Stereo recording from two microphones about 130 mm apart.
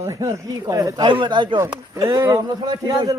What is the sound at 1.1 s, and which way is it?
Speech, 40° right (ahead or behind).